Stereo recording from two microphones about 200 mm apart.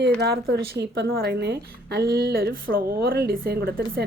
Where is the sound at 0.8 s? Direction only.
50° right (ahead or behind).